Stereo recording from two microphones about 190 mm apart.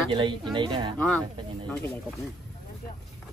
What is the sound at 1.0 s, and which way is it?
Speech, 5° left (ahead or behind).